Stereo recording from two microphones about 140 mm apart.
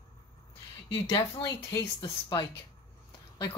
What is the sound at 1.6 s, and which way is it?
Speech, 20° left (ahead or behind).